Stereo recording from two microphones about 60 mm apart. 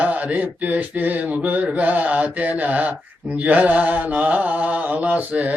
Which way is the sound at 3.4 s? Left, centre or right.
Right.